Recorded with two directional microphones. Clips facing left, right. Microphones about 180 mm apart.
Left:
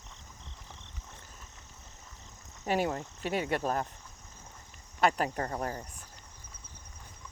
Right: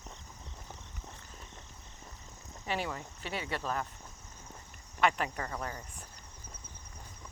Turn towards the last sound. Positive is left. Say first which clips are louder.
# left 5 dB
turn(degrees=40)  # may be behind; listen again after turning